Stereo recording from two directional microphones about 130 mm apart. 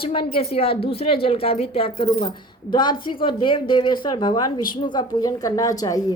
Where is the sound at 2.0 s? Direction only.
35° left (ahead or behind).